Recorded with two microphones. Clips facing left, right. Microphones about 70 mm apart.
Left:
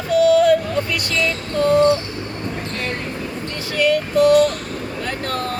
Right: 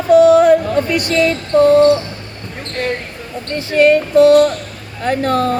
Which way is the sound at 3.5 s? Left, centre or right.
Right.